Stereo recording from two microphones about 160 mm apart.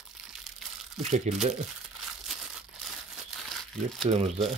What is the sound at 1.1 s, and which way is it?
Speech, 45° right (ahead or behind).